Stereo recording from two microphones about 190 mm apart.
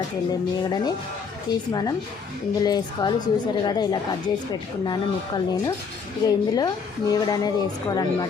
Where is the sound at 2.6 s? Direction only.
20° left (ahead or behind).